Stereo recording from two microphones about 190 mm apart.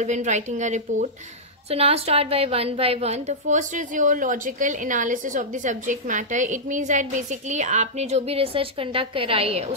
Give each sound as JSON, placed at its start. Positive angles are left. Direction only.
{"t": 0.0, "sound": "a woman's voice", "side_deg": -40}